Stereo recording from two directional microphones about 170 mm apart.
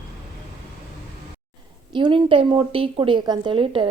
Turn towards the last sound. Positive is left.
turn(degrees=-30)  # may be behind; listen again after turning